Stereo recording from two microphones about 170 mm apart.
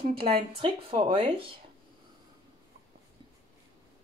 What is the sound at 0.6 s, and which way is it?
Speech, 35° right (ahead or behind).